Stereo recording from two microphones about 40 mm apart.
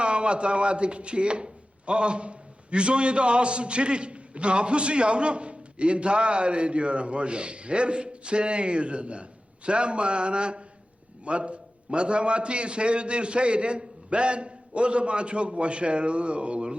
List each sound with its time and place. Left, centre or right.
0.0 s a man's voice: right